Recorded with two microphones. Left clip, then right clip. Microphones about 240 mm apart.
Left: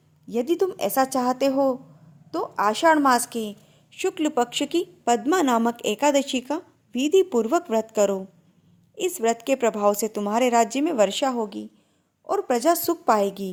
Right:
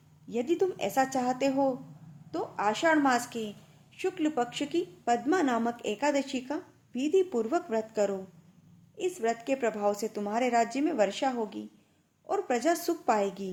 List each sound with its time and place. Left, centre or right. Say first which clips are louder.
0.3 s speech: left 5 dB; left